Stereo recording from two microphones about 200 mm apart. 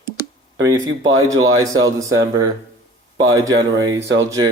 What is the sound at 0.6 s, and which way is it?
A man's voice, 20° right (ahead or behind).